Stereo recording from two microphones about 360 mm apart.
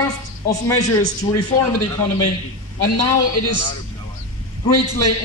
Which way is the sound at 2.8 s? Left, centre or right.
Right.